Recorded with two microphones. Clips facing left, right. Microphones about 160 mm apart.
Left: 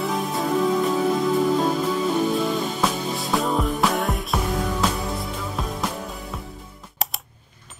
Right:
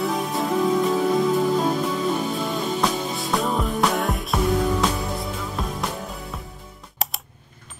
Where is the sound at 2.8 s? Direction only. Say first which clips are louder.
Even; centre (ahead or behind).